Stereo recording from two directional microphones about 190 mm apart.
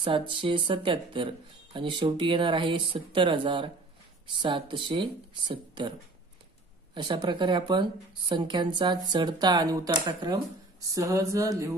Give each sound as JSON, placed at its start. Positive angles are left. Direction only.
{"t": 0.0, "sound": "speech", "side_deg": -25}